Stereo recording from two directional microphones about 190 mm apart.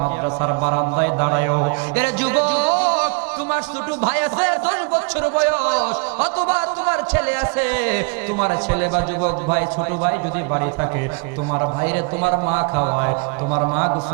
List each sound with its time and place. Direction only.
0.0 s mantra: 25° right (ahead or behind)
0.9 s a man's voice: 15° right (ahead or behind)
11.5 s mantra: 25° right (ahead or behind)